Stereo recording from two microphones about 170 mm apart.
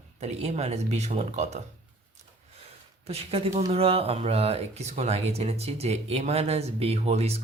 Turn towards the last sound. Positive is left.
turn(degrees=-40)  # may be behind; listen again after turning